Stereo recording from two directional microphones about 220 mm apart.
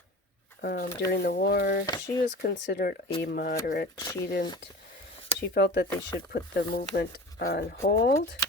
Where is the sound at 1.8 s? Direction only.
15° left (ahead or behind).